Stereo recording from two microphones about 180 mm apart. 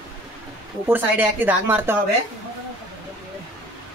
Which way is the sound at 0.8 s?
10° right (ahead or behind).